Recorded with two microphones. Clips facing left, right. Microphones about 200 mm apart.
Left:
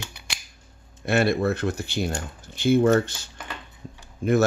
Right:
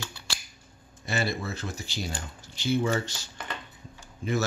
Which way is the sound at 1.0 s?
60° left (ahead or behind).